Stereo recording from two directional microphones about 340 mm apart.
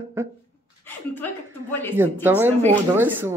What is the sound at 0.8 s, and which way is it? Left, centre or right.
Speech, centre.